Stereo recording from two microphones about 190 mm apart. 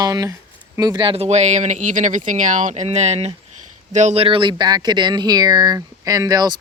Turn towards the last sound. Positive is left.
turn(degrees=-20)  # may be behind; listen again after turning